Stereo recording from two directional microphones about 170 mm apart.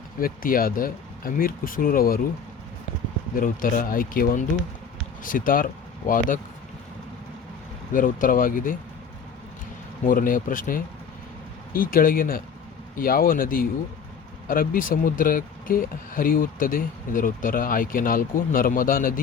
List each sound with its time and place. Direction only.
0.2 s speech: 55° left (ahead or behind)
3.3 s speech: 55° left (ahead or behind)
7.9 s speech: 55° left (ahead or behind)
10.0 s speech: 55° left (ahead or behind)